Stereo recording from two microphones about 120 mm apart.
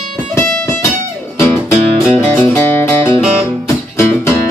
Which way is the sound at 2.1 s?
20° left (ahead or behind).